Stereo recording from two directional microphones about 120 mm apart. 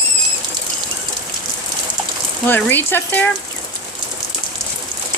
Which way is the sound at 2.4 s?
15° left (ahead or behind).